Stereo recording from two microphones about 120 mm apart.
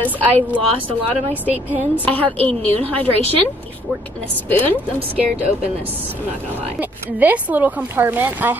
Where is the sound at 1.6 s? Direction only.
15° right (ahead or behind).